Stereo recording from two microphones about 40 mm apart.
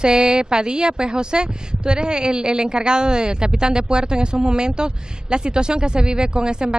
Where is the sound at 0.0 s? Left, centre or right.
Right.